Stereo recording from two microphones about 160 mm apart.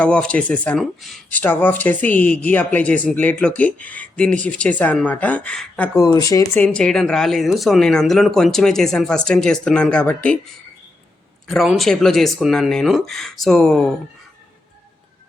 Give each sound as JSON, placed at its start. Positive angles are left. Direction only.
{"t": 0.0, "sound": "speech", "side_deg": 5}
{"t": 6.1, "sound": "speech", "side_deg": 20}
{"t": 6.7, "sound": "speech", "side_deg": 5}